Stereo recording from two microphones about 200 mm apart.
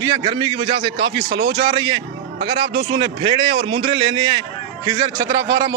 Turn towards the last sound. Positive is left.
turn(degrees=-15)  # may be behind; listen again after turning